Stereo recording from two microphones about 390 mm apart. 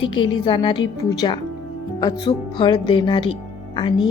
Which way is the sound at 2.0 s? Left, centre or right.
Centre.